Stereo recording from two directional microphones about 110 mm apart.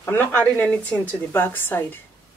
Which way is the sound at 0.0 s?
20° left (ahead or behind).